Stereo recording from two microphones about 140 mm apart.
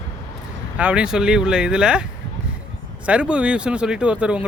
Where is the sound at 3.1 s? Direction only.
10° right (ahead or behind).